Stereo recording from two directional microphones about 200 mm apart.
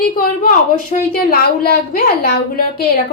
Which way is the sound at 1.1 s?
50° left (ahead or behind).